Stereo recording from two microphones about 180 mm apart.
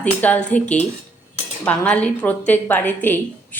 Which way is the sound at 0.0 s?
10° left (ahead or behind).